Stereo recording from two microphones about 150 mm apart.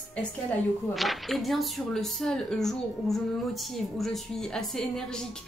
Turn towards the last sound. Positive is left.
turn(degrees=5)  # may be behind; listen again after turning